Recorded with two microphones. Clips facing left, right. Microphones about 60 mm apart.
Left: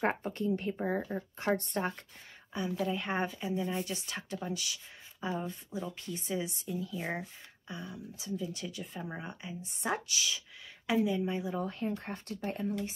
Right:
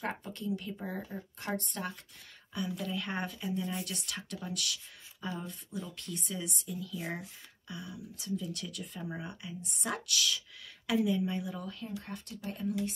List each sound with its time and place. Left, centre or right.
0.0 s speech: left
2.9 s speech: centre
11.5 s speech: left